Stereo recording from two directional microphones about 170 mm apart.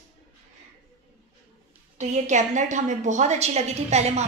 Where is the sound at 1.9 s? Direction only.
45° right (ahead or behind).